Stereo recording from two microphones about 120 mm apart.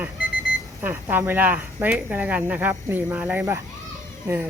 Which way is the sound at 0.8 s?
15° right (ahead or behind).